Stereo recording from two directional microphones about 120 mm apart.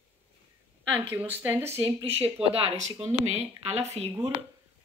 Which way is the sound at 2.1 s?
55° right (ahead or behind).